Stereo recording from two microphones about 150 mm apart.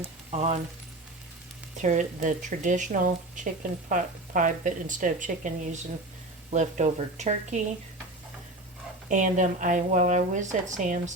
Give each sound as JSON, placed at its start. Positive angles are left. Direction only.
{"t": 0.0, "sound": "speech", "side_deg": -45}
{"t": 1.8, "sound": "speech", "side_deg": -55}
{"t": 9.0, "sound": "speech", "side_deg": -55}